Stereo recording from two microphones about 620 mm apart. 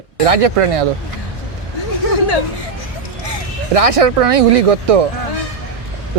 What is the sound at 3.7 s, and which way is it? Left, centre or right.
Speech, right.